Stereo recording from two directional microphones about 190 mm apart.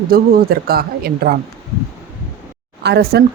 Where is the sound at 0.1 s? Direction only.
55° right (ahead or behind).